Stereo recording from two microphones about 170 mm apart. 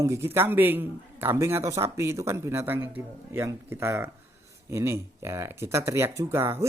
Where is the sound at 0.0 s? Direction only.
15° right (ahead or behind).